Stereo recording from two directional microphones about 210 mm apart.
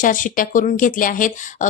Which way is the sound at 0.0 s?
40° left (ahead or behind).